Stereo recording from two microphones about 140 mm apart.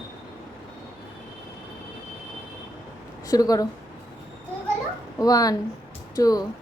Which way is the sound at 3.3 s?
25° left (ahead or behind).